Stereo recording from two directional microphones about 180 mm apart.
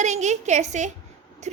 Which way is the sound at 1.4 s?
40° right (ahead or behind).